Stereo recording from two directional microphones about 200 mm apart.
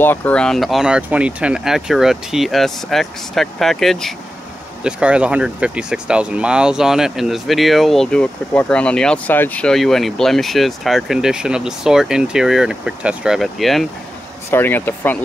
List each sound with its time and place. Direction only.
0.0 s speech: 10° left (ahead or behind)